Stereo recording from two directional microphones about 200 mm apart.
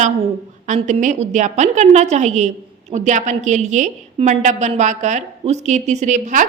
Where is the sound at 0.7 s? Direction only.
35° right (ahead or behind).